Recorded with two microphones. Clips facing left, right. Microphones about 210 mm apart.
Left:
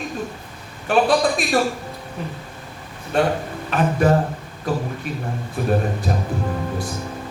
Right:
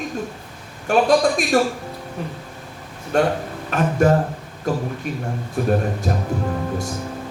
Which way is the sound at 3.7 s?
45° right (ahead or behind).